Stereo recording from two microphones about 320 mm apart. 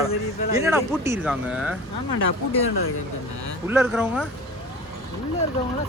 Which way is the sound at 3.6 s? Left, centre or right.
Centre.